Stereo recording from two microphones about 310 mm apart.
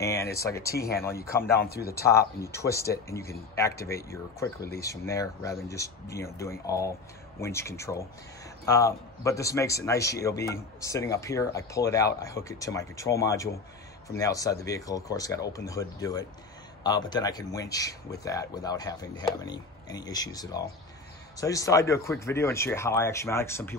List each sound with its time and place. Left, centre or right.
0.0 s a sound: centre
0.4 s speech: centre
0.7 s speech: left
2.6 s speech: centre